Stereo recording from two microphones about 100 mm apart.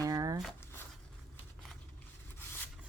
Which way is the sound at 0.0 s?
35° right (ahead or behind).